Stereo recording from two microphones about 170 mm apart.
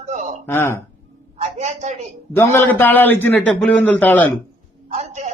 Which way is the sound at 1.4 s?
40° right (ahead or behind).